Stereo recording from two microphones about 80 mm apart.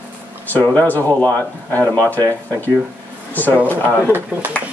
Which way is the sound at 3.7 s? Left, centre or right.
Right.